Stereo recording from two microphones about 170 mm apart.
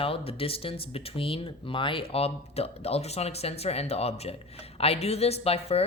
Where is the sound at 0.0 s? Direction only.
35° left (ahead or behind).